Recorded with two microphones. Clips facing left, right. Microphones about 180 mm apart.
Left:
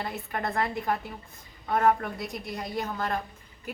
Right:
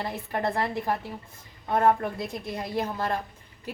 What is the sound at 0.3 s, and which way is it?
A woman's voice, 30° right (ahead or behind).